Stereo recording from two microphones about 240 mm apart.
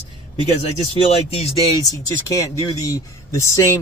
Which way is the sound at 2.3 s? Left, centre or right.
Centre.